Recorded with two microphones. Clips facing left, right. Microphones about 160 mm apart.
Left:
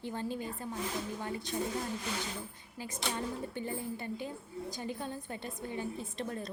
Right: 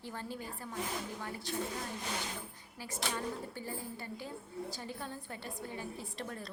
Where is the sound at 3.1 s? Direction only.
20° left (ahead or behind).